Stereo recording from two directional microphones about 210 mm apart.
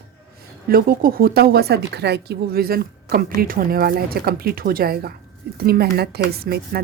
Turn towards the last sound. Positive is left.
turn(degrees=-45)  # may be behind; listen again after turning